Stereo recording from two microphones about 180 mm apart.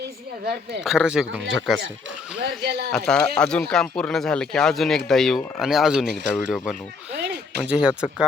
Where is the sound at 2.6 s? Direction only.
65° right (ahead or behind).